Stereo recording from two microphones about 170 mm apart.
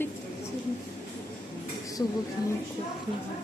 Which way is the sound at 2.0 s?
15° left (ahead or behind).